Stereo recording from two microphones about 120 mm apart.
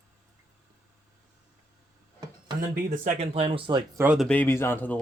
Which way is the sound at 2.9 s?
75° right (ahead or behind).